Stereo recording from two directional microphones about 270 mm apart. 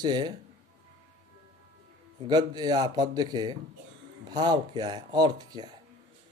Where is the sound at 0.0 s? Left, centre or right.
Centre.